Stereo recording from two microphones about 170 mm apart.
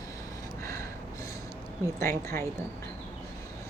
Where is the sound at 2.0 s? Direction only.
15° left (ahead or behind).